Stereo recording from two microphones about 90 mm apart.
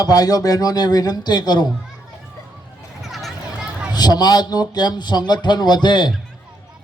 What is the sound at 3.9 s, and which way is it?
A man's voice, 50° left (ahead or behind).